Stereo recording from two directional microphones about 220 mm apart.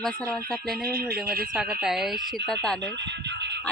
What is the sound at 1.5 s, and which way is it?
Speech, centre (ahead or behind).